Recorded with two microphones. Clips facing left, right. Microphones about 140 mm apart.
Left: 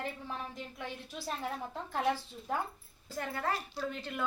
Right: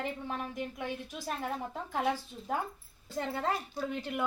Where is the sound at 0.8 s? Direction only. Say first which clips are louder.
Right 4 dB; 15° right (ahead or behind).